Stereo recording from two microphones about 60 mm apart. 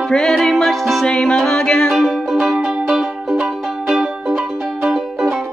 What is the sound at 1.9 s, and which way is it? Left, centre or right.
Music, centre.